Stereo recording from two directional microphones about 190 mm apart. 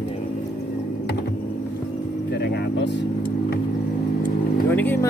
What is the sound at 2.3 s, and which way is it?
Vehicle, 60° left (ahead or behind).